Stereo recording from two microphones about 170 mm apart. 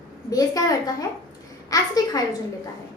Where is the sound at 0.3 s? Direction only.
20° left (ahead or behind).